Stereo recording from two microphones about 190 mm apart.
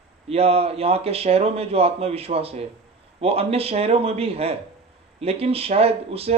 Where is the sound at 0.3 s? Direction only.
30° right (ahead or behind).